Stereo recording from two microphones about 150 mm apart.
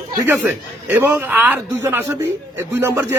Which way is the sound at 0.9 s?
15° right (ahead or behind).